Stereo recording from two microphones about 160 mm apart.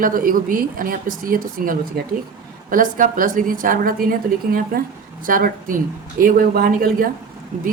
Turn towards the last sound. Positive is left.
turn(degrees=-50)  # may be behind; listen again after turning